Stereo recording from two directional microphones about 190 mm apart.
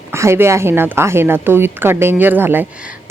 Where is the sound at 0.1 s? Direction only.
15° right (ahead or behind).